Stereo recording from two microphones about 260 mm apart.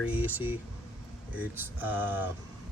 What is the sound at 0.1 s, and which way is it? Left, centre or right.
Speech, centre.